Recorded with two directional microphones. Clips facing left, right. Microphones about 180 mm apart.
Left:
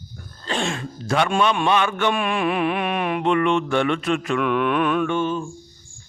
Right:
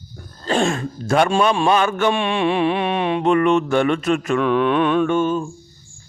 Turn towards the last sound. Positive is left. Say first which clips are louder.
# right 4 dB
turn(degrees=-45)  # may be behind; listen again after turning